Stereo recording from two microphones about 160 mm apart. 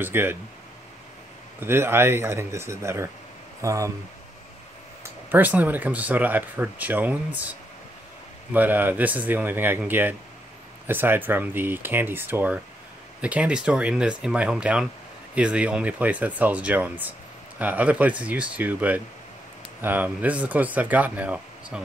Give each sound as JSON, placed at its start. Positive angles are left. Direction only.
{"t": 0.0, "sound": "speech", "side_deg": -15}
{"t": 1.6, "sound": "speech", "side_deg": -15}
{"t": 5.3, "sound": "speech", "side_deg": -10}
{"t": 8.5, "sound": "speech", "side_deg": -10}